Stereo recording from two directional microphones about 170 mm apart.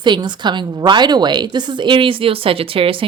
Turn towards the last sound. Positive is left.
turn(degrees=-30)  # may be behind; listen again after turning